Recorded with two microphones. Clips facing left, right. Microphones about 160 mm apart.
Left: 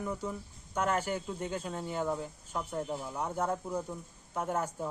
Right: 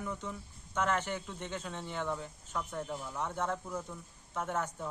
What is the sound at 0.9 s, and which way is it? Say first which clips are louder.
Speech: left 2 dB; 10° left (ahead or behind).